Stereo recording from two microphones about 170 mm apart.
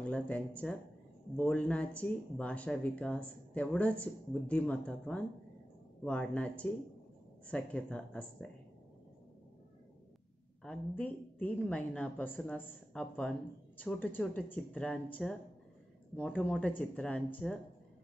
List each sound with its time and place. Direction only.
0.0 s speech: 10° left (ahead or behind)
10.6 s speech: 5° left (ahead or behind)